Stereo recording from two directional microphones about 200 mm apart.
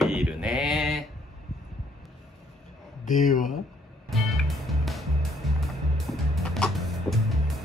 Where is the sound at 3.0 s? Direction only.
40° left (ahead or behind).